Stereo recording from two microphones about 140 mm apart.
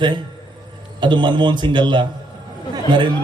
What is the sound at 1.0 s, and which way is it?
Speech, 35° right (ahead or behind).